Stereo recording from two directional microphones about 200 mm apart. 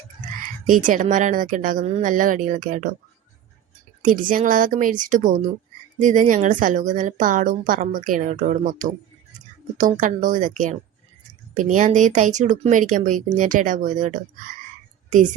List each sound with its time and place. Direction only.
0.7 s speech: 40° right (ahead or behind)
4.0 s speech: 40° right (ahead or behind)